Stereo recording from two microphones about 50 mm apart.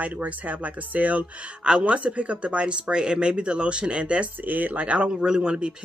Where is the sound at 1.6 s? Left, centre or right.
Centre.